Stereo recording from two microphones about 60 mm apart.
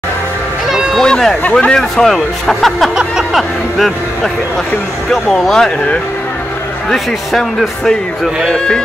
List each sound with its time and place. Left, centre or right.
0.9 s a sound: centre
1.4 s speech: left
1.8 s speech: centre
6.9 s speech: centre